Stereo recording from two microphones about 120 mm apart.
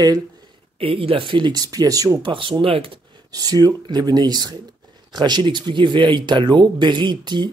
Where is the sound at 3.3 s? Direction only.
30° right (ahead or behind).